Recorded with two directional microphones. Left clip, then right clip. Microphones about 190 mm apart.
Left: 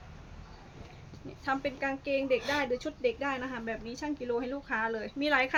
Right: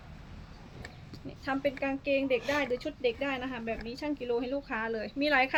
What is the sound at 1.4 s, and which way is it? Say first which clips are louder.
Speech: right 1 dB; 15° left (ahead or behind).